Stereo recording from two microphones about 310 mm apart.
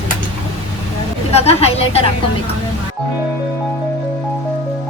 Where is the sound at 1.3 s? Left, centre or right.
Centre.